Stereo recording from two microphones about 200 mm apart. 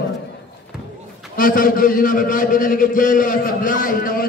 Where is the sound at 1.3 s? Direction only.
45° left (ahead or behind).